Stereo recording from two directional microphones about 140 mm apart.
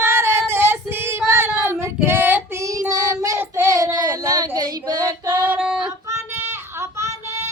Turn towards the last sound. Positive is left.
turn(degrees=-20)  # may be behind; listen again after turning